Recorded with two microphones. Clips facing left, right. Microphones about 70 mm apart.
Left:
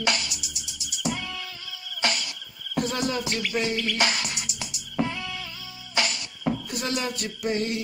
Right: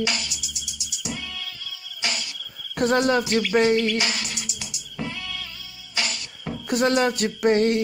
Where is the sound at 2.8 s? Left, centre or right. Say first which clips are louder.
Right 7 dB; right.